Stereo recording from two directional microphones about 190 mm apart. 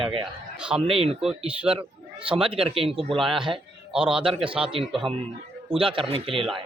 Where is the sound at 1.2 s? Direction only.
5° right (ahead or behind).